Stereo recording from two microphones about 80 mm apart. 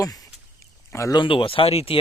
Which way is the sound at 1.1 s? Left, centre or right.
Left.